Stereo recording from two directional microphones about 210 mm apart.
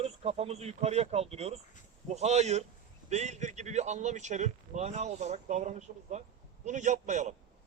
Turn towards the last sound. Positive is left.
turn(degrees=-35)  # may be behind; listen again after turning